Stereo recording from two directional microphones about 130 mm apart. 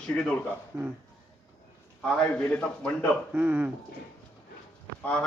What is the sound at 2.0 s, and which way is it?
A man's voice, 10° left (ahead or behind).